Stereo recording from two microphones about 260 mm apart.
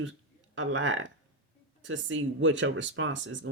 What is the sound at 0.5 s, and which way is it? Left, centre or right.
Speech, right.